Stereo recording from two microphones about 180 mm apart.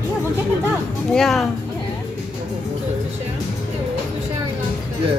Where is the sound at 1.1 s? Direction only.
Centre (ahead or behind).